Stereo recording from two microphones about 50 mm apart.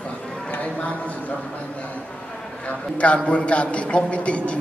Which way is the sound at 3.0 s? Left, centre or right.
Left.